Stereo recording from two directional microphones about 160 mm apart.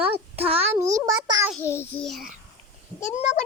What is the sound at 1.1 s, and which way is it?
Speech, 25° right (ahead or behind).